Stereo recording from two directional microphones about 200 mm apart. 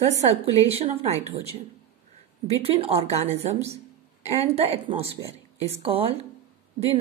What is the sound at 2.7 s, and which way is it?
A woman's voice, 30° right (ahead or behind).